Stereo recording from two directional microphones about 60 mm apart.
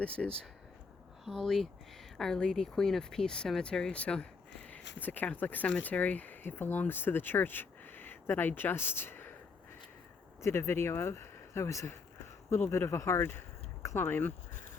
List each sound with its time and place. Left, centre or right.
0.2 s speech: centre
4.9 s speech: left
10.4 s speech: left
12.5 s speech: left
13.9 s speech: left